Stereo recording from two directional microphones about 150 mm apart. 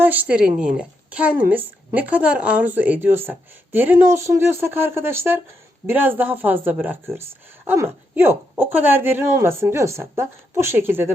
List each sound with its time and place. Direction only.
0.0 s speech: 10° right (ahead or behind)